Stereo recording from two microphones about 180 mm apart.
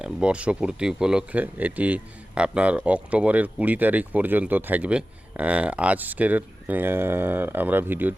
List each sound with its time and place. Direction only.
0.0 s speech: 5° right (ahead or behind)